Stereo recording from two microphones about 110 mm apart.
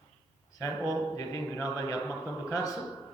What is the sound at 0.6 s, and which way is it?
A man's voice, 25° left (ahead or behind).